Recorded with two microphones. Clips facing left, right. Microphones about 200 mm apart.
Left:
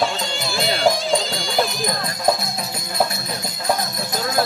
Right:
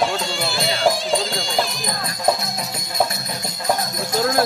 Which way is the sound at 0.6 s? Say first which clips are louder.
Left 1 dB; centre (ahead or behind).